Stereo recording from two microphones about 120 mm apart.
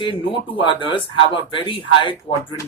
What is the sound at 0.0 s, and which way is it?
Speech, 45° left (ahead or behind).